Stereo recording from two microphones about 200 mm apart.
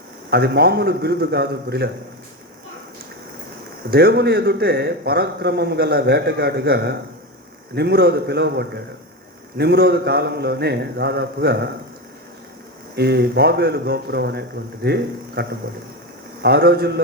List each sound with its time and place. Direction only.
0.3 s a man's voice: 55° right (ahead or behind)
3.8 s a man's voice: 50° right (ahead or behind)
13.0 s a man's voice: 55° right (ahead or behind)